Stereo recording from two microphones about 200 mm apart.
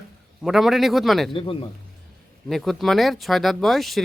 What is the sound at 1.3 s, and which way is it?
Speech, 25° left (ahead or behind).